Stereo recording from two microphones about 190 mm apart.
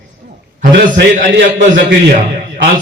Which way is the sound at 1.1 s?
45° right (ahead or behind).